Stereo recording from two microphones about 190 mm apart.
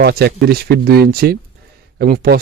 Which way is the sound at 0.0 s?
55° right (ahead or behind).